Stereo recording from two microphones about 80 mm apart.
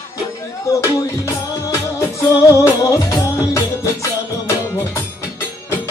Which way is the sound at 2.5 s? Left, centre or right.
Left.